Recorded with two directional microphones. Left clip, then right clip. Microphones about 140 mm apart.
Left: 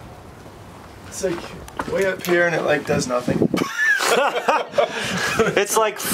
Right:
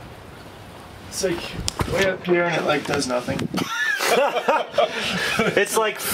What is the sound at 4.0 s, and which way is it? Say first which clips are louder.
Speech: left 1 dB; 5° left (ahead or behind).